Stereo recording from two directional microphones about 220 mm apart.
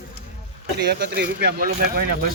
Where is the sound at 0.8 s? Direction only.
50° right (ahead or behind).